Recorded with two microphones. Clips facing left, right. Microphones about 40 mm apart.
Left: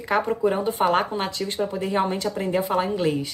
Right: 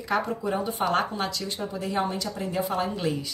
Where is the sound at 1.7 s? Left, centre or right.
Left.